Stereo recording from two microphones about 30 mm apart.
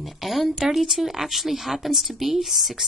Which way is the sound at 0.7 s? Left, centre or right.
Centre.